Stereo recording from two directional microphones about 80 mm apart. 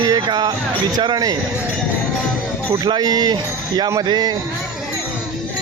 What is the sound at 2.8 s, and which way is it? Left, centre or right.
Speech, right.